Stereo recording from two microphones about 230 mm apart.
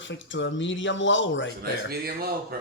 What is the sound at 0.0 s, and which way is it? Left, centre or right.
Speech, left.